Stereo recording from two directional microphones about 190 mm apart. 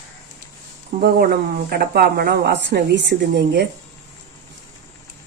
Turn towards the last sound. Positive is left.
turn(degrees=-60)  # may be behind; listen again after turning